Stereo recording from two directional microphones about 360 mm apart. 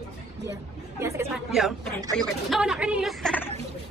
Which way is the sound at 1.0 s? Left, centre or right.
Centre.